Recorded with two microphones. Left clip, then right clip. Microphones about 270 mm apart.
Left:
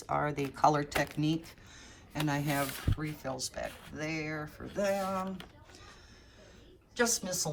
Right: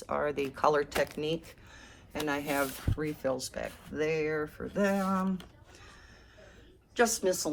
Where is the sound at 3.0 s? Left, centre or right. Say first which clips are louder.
Right 9 dB; left.